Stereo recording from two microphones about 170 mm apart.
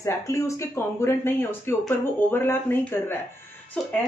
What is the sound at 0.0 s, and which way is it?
Speech, 15° left (ahead or behind).